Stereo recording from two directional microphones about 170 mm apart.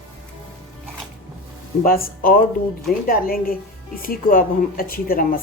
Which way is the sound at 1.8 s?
60° left (ahead or behind).